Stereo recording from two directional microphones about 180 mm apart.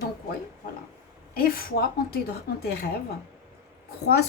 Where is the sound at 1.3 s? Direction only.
55° left (ahead or behind).